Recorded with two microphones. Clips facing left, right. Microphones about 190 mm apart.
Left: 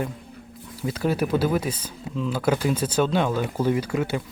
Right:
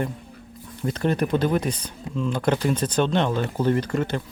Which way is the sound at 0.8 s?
5° left (ahead or behind).